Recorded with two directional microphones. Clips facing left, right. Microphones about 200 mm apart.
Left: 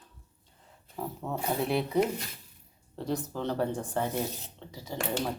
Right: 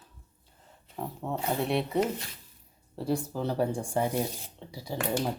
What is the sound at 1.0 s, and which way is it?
Speech, centre (ahead or behind).